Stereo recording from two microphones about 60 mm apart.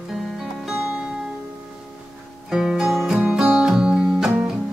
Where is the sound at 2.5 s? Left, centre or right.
Centre.